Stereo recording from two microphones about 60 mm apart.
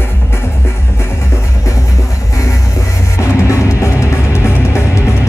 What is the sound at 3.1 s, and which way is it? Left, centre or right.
Music, left.